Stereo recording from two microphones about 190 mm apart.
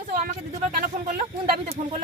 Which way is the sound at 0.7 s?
50° right (ahead or behind).